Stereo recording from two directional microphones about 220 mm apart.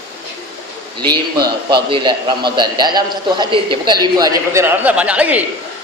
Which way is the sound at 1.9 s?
20° right (ahead or behind).